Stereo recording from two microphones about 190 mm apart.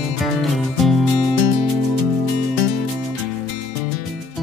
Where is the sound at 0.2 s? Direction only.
Centre (ahead or behind).